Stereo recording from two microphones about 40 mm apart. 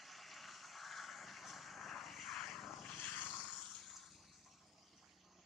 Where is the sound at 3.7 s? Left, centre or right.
Centre.